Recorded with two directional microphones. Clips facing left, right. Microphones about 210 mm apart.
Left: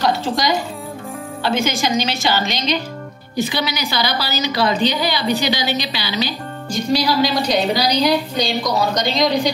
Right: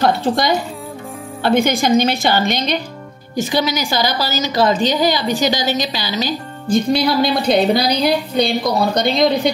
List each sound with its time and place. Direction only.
0.0 s a woman's voice: 60° right (ahead or behind)
1.4 s a woman's voice: 55° right (ahead or behind)